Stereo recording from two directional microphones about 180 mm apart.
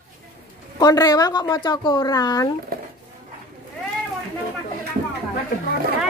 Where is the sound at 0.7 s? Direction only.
20° left (ahead or behind).